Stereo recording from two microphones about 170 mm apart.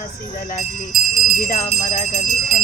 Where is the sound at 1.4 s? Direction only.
50° left (ahead or behind).